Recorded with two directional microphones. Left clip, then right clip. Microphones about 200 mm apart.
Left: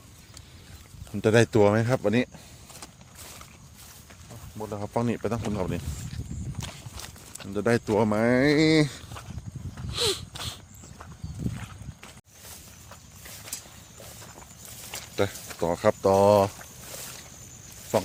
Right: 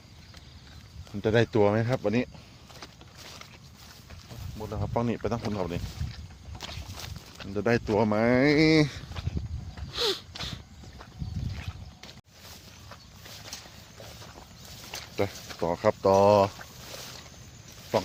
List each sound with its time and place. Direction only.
1.2 s speech: 35° left (ahead or behind)
4.6 s speech: 25° left (ahead or behind)
6.9 s walk: centre (ahead or behind)
7.5 s speech: 20° left (ahead or behind)
9.9 s a sound: 15° left (ahead or behind)
14.8 s a sound: 10° left (ahead or behind)
15.6 s speech: 20° left (ahead or behind)
16.9 s boat: 10° left (ahead or behind)